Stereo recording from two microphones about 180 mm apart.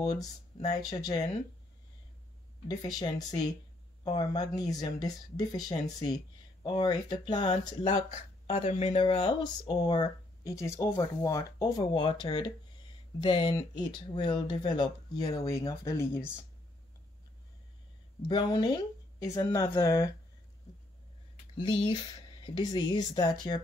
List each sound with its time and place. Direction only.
0.0 s speech: 20° left (ahead or behind)
2.7 s speech: 20° left (ahead or behind)
18.3 s speech: 25° left (ahead or behind)
22.4 s speech: 25° left (ahead or behind)